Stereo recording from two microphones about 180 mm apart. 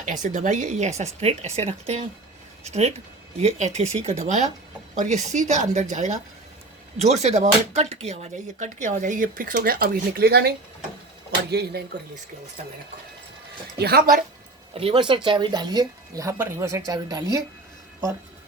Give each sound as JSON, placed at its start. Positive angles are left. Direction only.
{"t": 0.0, "sound": "speech", "side_deg": -45}
{"t": 13.7, "sound": "a woman's voice", "side_deg": -60}
{"t": 14.8, "sound": "speech", "side_deg": -30}